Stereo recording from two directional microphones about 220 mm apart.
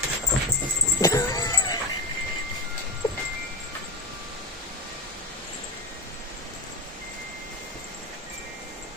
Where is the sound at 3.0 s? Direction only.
20° left (ahead or behind).